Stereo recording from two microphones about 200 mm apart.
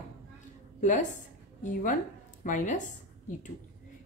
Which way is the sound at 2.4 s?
40° left (ahead or behind).